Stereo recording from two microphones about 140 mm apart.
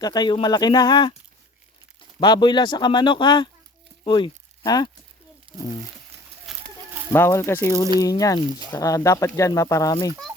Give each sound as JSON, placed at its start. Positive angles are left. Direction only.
{"t": 0.0, "sound": "speech", "side_deg": 30}
{"t": 5.5, "sound": "crumpling", "side_deg": -40}
{"t": 6.5, "sound": "chicken", "side_deg": 0}
{"t": 7.1, "sound": "speech", "side_deg": 20}
{"t": 8.4, "sound": "speech", "side_deg": -35}
{"t": 9.0, "sound": "speech", "side_deg": 20}